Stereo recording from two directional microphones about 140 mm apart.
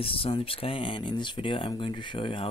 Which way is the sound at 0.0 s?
40° left (ahead or behind).